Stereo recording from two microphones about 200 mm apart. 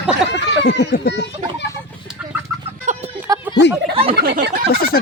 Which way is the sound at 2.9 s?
40° right (ahead or behind).